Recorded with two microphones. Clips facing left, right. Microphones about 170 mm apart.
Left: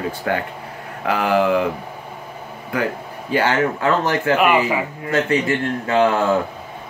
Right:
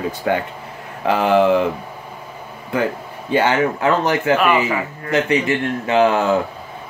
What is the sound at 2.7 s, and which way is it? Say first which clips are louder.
Speech: right 2 dB; 25° right (ahead or behind).